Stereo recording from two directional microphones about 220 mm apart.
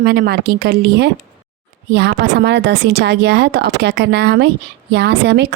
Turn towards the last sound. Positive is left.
turn(degrees=-50)  # may be behind; listen again after turning